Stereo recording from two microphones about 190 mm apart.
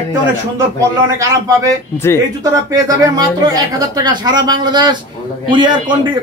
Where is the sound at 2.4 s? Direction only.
15° right (ahead or behind).